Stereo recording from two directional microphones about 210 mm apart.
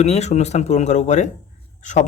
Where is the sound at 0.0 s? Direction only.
30° left (ahead or behind).